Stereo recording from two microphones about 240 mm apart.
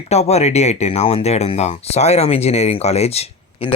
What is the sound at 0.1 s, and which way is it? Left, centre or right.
Speech, left.